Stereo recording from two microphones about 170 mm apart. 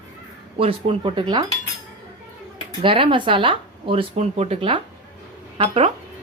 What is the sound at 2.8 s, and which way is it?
A woman's voice, 30° right (ahead or behind).